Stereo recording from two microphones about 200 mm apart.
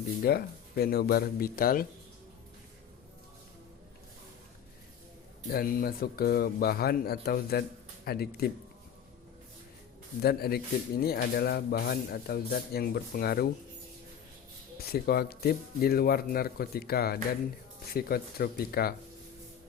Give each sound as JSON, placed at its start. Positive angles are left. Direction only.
{"t": 0.3, "sound": "a man's voice", "side_deg": 50}
{"t": 5.5, "sound": "a man's voice", "side_deg": 50}
{"t": 10.2, "sound": "a man's voice", "side_deg": 50}
{"t": 14.8, "sound": "a man's voice", "side_deg": 50}